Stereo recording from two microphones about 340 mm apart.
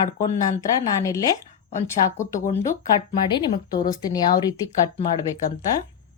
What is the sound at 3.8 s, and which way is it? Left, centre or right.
Speech, centre.